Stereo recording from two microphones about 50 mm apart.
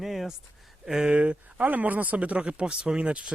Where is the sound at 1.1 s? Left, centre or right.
Right.